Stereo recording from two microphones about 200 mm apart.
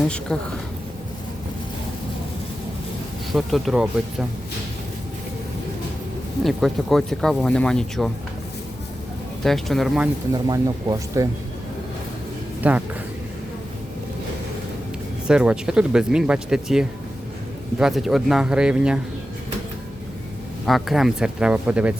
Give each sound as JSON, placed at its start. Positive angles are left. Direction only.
{"t": 0.3, "sound": "speech", "side_deg": 5}
{"t": 3.3, "sound": "speech", "side_deg": 0}
{"t": 6.4, "sound": "speech", "side_deg": 0}
{"t": 9.4, "sound": "speech", "side_deg": 0}
{"t": 10.3, "sound": "speech", "side_deg": -20}
{"t": 12.6, "sound": "speech", "side_deg": -5}
{"t": 15.3, "sound": "speech", "side_deg": -5}
{"t": 20.7, "sound": "speech", "side_deg": 0}